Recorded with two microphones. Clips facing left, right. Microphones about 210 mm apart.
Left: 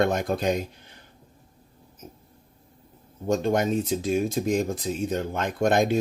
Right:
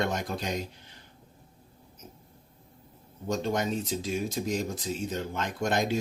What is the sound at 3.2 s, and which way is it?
Speech, 50° left (ahead or behind).